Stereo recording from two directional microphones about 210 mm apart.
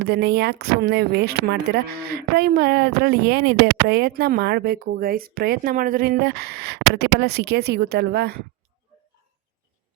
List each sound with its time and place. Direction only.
0.0 s speech: 50° right (ahead or behind)